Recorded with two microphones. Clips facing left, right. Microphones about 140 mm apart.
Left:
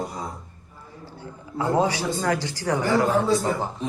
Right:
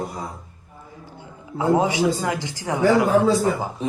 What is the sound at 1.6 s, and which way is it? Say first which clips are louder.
A man's voice: right 4 dB; 20° right (ahead or behind).